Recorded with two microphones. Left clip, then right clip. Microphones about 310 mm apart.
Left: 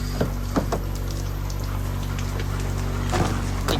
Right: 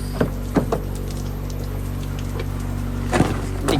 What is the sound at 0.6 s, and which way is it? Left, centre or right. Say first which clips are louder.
Music: right 4 dB; right.